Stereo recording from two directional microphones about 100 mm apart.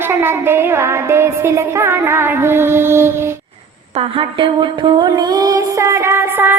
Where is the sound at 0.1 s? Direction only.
25° right (ahead or behind).